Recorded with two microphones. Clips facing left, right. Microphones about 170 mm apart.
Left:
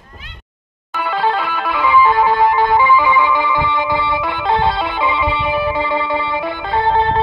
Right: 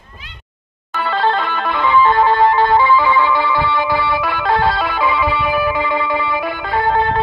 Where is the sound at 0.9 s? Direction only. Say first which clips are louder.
Right 1 dB; 10° left (ahead or behind).